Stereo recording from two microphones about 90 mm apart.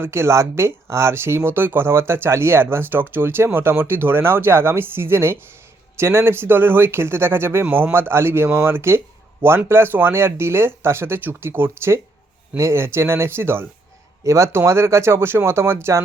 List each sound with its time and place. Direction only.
0.0 s speech: 30° right (ahead or behind)